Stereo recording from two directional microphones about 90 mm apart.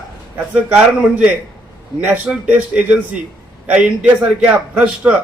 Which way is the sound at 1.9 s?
20° right (ahead or behind).